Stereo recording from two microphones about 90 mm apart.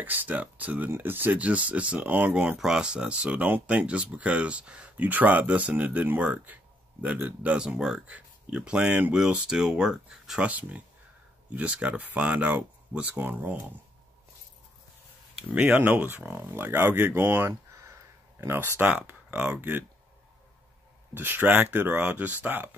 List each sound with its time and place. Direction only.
0.0 s speech: 20° right (ahead or behind)
11.5 s speech: 15° right (ahead or behind)
15.3 s speech: 10° right (ahead or behind)
21.1 s speech: 20° right (ahead or behind)